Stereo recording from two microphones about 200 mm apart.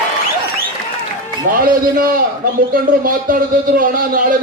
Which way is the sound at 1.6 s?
45° right (ahead or behind).